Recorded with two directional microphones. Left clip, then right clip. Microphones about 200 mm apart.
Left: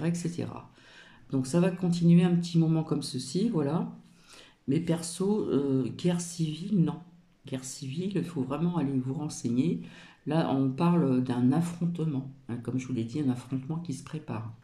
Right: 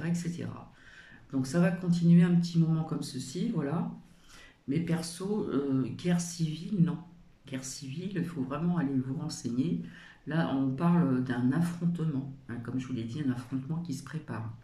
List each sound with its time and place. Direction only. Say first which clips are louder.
0.0 s speech: left 4 dB; 25° left (ahead or behind)